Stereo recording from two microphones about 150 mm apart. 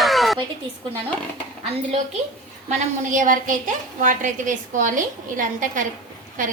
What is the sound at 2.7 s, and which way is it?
A woman's voice, 60° right (ahead or behind).